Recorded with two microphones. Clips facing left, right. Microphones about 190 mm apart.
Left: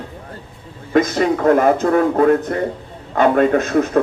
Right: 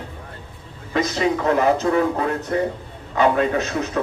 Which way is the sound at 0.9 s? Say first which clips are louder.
Left 5 dB; 50° left (ahead or behind).